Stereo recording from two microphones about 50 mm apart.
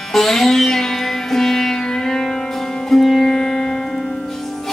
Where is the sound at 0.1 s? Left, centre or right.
Centre.